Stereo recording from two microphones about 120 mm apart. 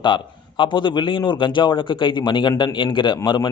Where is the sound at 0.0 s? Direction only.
40° left (ahead or behind).